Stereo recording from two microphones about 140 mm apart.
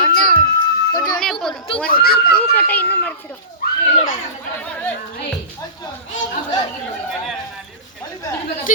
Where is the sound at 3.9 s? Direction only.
55° left (ahead or behind).